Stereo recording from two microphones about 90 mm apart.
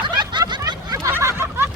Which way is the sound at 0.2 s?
55° right (ahead or behind).